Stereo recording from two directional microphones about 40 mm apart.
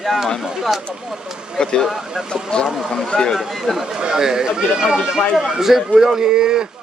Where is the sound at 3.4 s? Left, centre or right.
Centre.